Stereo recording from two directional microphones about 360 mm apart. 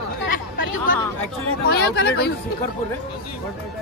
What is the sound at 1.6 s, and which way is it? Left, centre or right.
Speech, left.